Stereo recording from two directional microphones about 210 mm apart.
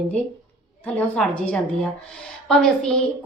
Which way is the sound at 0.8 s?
5° left (ahead or behind).